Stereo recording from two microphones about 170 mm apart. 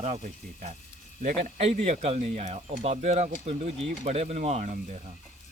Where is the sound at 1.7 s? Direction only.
40° right (ahead or behind).